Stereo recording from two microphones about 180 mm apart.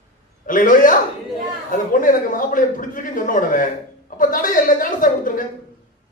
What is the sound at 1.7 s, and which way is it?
A man's voice, 45° left (ahead or behind).